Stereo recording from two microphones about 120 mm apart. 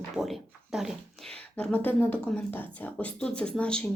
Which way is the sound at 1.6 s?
10° left (ahead or behind).